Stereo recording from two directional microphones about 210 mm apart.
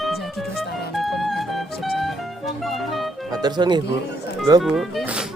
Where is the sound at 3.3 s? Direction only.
20° right (ahead or behind).